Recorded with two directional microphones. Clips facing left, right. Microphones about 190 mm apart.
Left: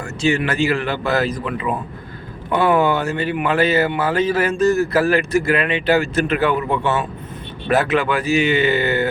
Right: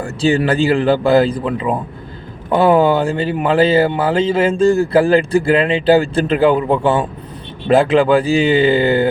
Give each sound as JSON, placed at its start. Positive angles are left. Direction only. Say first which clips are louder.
{"t": 0.0, "sound": "speech", "louder": "right 4 dB", "side_deg": -35}